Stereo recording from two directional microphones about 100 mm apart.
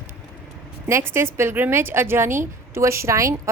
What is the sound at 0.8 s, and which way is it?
A woman's voice, 25° right (ahead or behind).